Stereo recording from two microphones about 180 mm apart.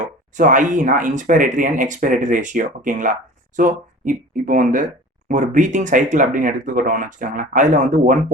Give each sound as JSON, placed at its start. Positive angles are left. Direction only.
{"t": 0.3, "sound": "speech", "side_deg": -45}